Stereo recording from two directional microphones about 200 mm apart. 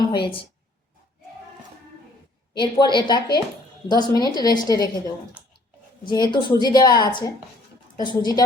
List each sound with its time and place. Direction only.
2.6 s a woman's voice: 20° left (ahead or behind)
6.1 s a woman's voice: 20° left (ahead or behind)